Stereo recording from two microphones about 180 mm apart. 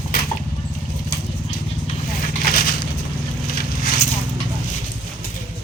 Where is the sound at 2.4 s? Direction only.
55° left (ahead or behind).